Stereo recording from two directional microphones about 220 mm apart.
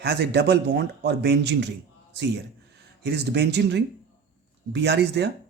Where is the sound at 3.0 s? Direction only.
50° right (ahead or behind).